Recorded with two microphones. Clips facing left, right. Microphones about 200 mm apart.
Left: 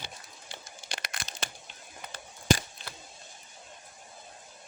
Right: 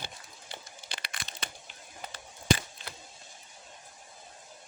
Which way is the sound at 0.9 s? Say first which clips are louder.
Left 4 dB; 45° left (ahead or behind).